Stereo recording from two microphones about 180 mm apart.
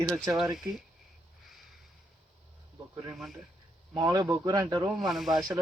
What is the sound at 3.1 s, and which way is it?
Speech, centre (ahead or behind).